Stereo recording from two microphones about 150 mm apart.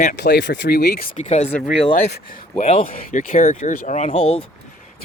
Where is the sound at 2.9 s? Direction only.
70° left (ahead or behind); by 4.2 s 50° left (ahead or behind).